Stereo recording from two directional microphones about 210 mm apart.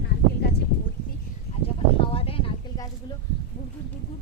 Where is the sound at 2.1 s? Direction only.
25° left (ahead or behind).